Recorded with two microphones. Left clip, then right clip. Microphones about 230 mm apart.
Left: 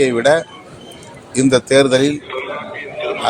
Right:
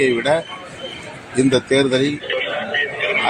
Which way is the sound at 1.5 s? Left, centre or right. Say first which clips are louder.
Left 6 dB; left.